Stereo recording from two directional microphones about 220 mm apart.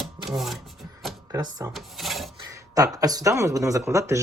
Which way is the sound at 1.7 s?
Centre (ahead or behind).